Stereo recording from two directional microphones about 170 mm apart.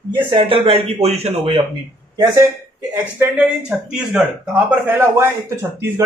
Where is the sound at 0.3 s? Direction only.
30° right (ahead or behind).